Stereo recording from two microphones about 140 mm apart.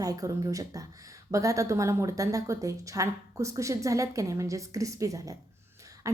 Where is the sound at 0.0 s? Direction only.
25° right (ahead or behind).